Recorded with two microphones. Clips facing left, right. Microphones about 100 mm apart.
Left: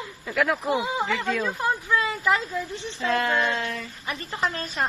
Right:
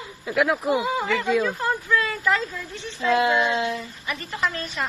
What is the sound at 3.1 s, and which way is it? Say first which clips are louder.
Child singing: right 4 dB; 15° right (ahead or behind).